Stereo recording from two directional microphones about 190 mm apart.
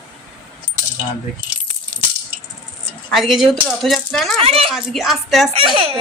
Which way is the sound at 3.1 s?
Centre (ahead or behind).